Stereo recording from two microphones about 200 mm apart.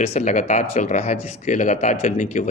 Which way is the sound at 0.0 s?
35° left (ahead or behind).